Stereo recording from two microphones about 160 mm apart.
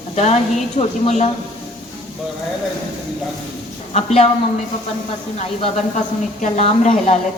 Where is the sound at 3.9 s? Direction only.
40° left (ahead or behind).